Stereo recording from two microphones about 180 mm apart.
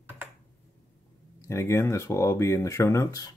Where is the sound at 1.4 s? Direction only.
15° left (ahead or behind).